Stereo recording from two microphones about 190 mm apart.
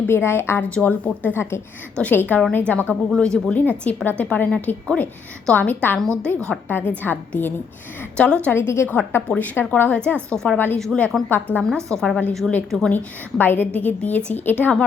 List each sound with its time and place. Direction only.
0.1 s a woman's voice: 10° left (ahead or behind)